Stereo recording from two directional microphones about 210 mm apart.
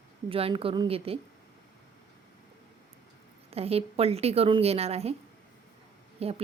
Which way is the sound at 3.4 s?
30° right (ahead or behind).